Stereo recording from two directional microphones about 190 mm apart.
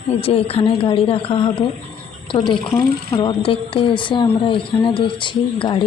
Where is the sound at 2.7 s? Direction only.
25° left (ahead or behind).